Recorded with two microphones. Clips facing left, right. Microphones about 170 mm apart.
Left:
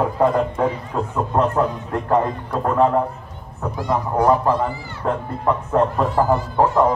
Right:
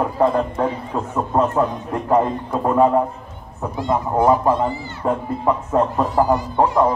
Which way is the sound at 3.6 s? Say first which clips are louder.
Right 1 dB; 20° right (ahead or behind).